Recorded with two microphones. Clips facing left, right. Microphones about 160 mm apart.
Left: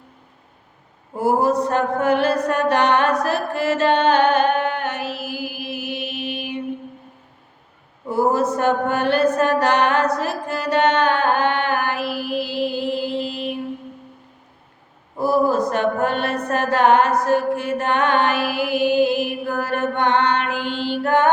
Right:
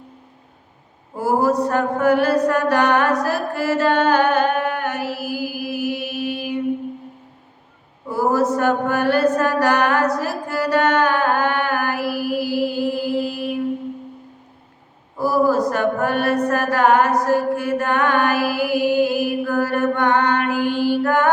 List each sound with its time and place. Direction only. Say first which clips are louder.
1.2 s a sound: even; 20° left (ahead or behind)
8.1 s mantra: even; 20° left (ahead or behind)
15.2 s mantra: right 1 dB; 20° left (ahead or behind)